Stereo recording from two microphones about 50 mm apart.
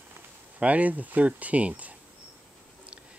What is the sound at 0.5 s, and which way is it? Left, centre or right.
Speech, right.